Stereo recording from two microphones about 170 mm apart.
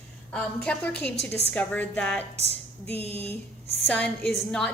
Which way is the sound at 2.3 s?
40° right (ahead or behind).